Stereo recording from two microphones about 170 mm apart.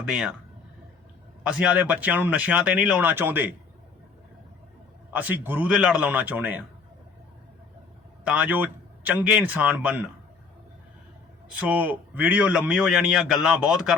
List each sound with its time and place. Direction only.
0.0 s a man's voice: 5° right (ahead or behind)
1.5 s a man's voice: 5° right (ahead or behind)
5.1 s a man's voice: 10° right (ahead or behind)
8.2 s a man's voice: 5° right (ahead or behind)
11.6 s a man's voice: 10° right (ahead or behind)